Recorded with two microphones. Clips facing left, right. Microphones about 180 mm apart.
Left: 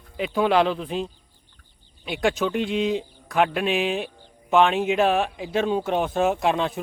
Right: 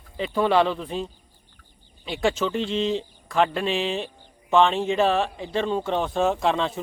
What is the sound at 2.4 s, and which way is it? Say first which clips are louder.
Speech: left 1 dB; 15° left (ahead or behind).